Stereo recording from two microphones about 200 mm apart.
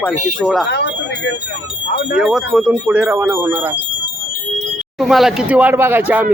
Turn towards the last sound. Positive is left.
turn(degrees=-10)  # may be behind; listen again after turning